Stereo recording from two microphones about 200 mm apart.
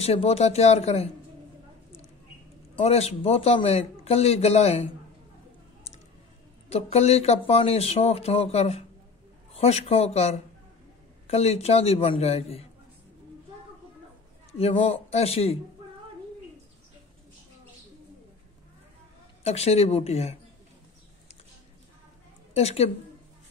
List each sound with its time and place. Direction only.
0.0 s a man's voice: 30° left (ahead or behind)
2.8 s a man's voice: 30° left (ahead or behind)
6.7 s a man's voice: 30° left (ahead or behind)
14.6 s a man's voice: 30° left (ahead or behind)
19.4 s a man's voice: 30° left (ahead or behind)
22.5 s a woman's voice: 30° left (ahead or behind)